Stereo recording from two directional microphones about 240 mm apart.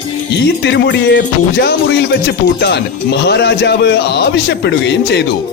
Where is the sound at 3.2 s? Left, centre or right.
Left.